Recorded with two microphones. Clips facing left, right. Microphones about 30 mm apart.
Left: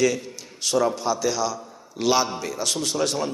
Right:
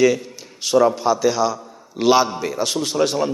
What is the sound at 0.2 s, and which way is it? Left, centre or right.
A man's voice, centre.